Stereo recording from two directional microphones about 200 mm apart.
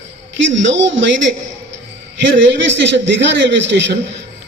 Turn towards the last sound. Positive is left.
turn(degrees=-65)  # may be behind; listen again after turning